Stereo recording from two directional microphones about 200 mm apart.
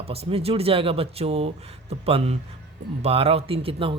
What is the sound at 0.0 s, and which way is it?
A man's voice, 30° right (ahead or behind).